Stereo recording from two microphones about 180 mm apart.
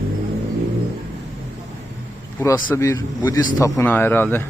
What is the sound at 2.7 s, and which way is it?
A man's voice, 15° left (ahead or behind).